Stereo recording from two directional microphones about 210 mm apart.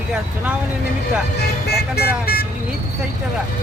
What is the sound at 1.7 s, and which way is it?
Speech, 50° left (ahead or behind).